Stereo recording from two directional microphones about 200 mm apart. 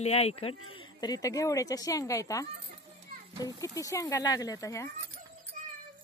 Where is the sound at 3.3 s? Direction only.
15° right (ahead or behind).